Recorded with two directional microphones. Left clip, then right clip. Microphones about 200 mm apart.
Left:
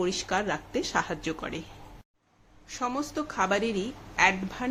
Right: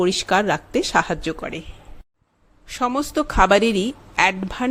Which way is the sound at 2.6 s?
40° right (ahead or behind).